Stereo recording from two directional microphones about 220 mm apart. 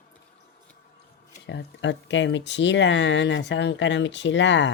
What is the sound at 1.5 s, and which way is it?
Speech, 55° left (ahead or behind).